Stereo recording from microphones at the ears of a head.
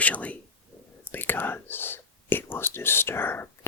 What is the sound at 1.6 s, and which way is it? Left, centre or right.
Whispering, left.